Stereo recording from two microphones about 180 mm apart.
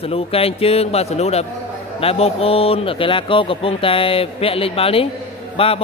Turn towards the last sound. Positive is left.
turn(degrees=30)  # may be behind; listen again after turning